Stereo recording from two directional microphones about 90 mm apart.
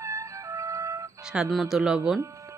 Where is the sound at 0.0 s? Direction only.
35° right (ahead or behind).